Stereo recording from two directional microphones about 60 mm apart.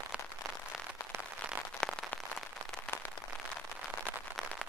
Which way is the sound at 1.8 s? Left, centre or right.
Left.